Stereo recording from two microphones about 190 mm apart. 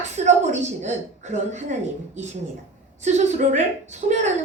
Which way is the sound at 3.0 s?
35° right (ahead or behind).